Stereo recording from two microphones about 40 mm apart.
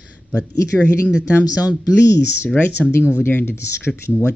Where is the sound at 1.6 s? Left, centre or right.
Right.